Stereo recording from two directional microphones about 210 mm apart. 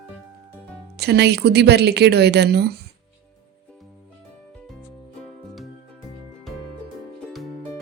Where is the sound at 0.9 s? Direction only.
50° right (ahead or behind).